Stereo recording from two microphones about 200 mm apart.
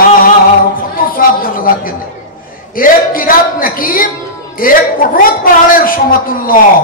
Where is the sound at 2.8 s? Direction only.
45° left (ahead or behind).